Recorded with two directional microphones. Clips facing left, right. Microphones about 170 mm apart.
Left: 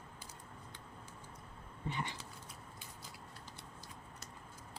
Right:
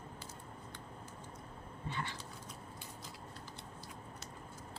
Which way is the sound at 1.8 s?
15° left (ahead or behind).